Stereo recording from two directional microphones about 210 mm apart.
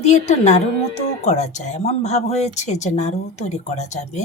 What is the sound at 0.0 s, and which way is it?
Speech, 30° left (ahead or behind).